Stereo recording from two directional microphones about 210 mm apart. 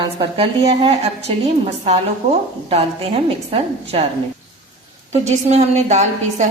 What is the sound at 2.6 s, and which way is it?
A woman's voice, 25° right (ahead or behind).